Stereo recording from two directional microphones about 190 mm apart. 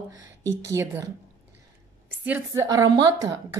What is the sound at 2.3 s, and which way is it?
A woman's voice, 15° right (ahead or behind).